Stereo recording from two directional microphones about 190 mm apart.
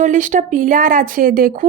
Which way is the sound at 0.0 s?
40° right (ahead or behind).